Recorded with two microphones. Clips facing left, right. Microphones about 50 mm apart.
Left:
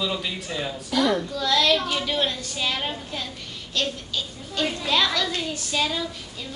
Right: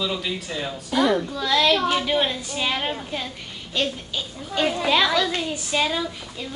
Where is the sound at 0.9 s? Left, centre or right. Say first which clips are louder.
Right 2 dB; centre.